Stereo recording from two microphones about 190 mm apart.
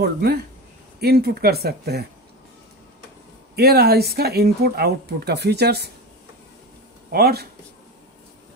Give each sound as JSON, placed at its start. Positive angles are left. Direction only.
{"t": 0.0, "sound": "speech", "side_deg": -60}
{"t": 3.5, "sound": "speech", "side_deg": -55}
{"t": 7.1, "sound": "speech", "side_deg": -55}